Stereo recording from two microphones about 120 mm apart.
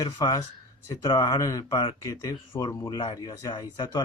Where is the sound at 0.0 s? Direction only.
35° left (ahead or behind).